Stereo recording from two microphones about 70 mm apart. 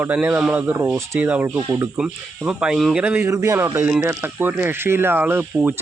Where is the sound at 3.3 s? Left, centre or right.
Right.